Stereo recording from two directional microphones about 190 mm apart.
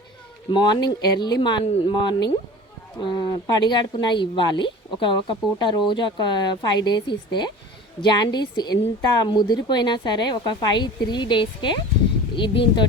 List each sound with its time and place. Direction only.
0.5 s speech: 25° left (ahead or behind)